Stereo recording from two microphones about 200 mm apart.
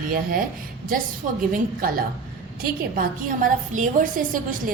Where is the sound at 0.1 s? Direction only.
45° right (ahead or behind).